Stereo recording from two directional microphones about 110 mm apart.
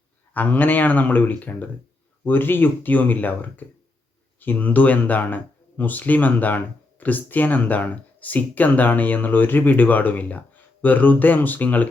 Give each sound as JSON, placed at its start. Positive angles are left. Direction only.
{"t": 0.3, "sound": "speech", "side_deg": 15}
{"t": 4.4, "sound": "speech", "side_deg": 15}